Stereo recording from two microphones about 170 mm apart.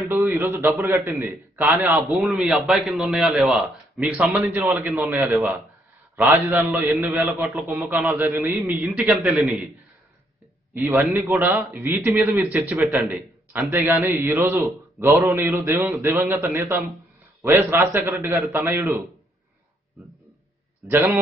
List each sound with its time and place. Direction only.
0.0 s a man's voice: 15° right (ahead or behind)
4.2 s a man's voice: 15° right (ahead or behind)
5.2 s a man's voice: centre (ahead or behind)
6.1 s a man's voice: 15° right (ahead or behind)
10.7 s a man's voice: 15° right (ahead or behind)
20.8 s a man's voice: 15° right (ahead or behind)